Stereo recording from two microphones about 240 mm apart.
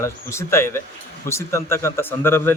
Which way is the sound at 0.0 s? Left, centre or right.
Centre.